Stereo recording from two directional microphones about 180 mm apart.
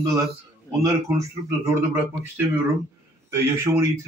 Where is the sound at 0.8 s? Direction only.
20° right (ahead or behind).